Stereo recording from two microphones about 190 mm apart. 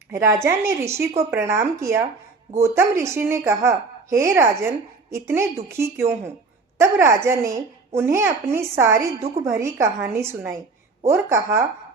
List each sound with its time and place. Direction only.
0.1 s a woman's voice: 15° right (ahead or behind)